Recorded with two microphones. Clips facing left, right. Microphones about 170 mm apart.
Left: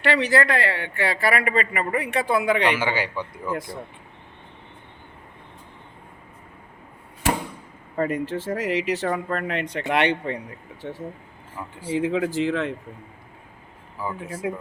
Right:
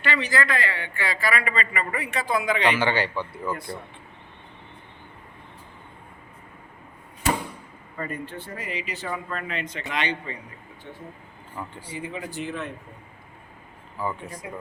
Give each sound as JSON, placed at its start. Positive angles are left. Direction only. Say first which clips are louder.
{"t": 0.0, "sound": "speech", "louder": "left 5 dB", "side_deg": 70}
{"t": 2.6, "sound": "a man's voice", "louder": "even", "side_deg": 10}
{"t": 7.9, "sound": "speech", "louder": "left 9 dB", "side_deg": 90}
{"t": 11.9, "sound": "speech", "louder": "left 14 dB", "side_deg": 90}
{"t": 14.0, "sound": "a man's voice", "louder": "even", "side_deg": 5}